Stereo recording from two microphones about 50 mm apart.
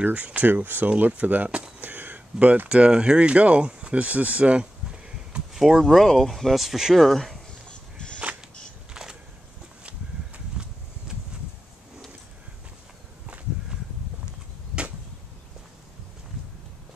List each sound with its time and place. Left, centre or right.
0.0 s speech: right
5.5 s speech: centre
9.8 s a sound: right